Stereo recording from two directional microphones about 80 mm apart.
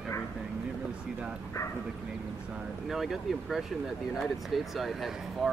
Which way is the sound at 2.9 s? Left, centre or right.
Centre.